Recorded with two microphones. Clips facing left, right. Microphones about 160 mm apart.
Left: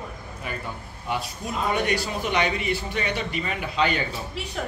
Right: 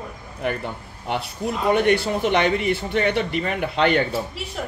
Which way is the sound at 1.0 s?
65° right (ahead or behind).